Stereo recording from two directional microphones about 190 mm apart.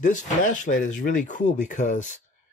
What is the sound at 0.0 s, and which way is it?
Speech, 40° left (ahead or behind).